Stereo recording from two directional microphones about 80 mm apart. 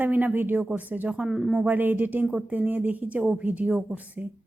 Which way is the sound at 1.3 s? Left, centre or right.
Centre.